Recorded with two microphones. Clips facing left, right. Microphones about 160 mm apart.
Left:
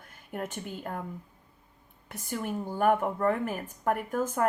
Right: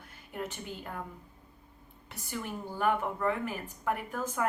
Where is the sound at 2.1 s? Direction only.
50° left (ahead or behind).